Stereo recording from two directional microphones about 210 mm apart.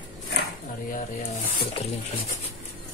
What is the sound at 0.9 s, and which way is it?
Speech, 40° left (ahead or behind).